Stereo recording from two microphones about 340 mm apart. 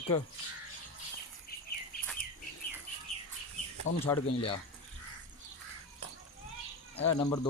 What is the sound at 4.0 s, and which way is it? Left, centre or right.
Speech, centre.